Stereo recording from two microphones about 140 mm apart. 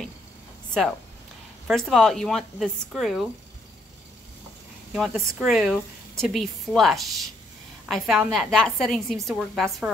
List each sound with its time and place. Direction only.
1.7 s a woman's voice: centre (ahead or behind)
4.9 s a woman's voice: centre (ahead or behind)